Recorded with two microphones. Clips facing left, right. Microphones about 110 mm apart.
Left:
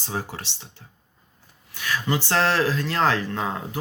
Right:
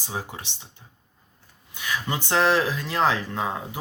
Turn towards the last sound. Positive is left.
turn(degrees=-10)  # may be behind; listen again after turning